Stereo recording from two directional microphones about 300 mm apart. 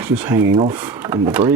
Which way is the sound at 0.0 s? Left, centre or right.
Centre.